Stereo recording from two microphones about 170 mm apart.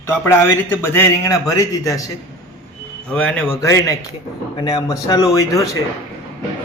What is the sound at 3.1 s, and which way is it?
A man's voice, 10° left (ahead or behind).